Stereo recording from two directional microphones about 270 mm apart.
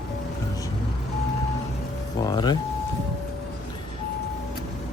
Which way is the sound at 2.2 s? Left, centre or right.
Centre.